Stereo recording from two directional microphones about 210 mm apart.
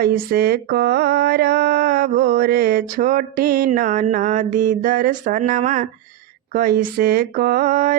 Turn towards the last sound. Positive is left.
turn(degrees=-40)  # may be behind; listen again after turning